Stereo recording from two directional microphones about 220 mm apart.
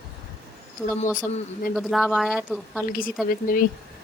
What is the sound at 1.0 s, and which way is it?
Speech, 35° left (ahead or behind).